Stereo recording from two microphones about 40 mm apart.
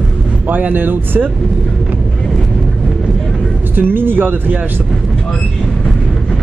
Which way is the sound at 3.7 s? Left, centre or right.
Right.